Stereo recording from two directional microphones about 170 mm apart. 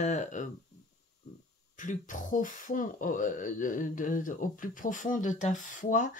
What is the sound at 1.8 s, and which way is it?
Speech, 50° left (ahead or behind).